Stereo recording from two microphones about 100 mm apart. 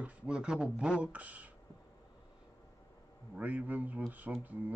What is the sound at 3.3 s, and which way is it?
A man's voice, 15° right (ahead or behind).